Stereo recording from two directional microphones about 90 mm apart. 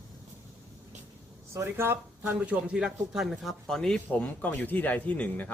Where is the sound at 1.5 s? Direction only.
30° right (ahead or behind).